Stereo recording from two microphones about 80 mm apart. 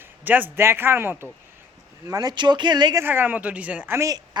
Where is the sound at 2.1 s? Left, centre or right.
Right.